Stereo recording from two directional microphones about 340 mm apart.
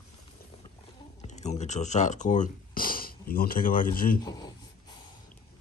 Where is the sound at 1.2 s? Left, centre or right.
Centre.